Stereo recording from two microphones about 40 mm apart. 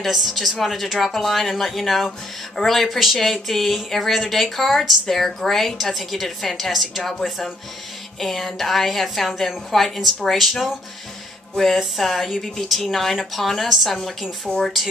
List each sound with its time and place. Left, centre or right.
0.0 s speech: centre
14.5 s speech: left